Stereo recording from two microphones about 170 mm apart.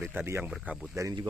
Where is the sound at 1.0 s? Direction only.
20° right (ahead or behind).